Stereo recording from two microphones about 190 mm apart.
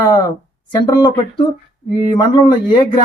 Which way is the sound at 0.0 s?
20° left (ahead or behind).